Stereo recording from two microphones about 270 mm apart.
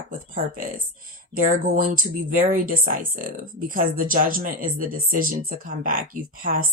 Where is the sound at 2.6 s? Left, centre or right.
Right.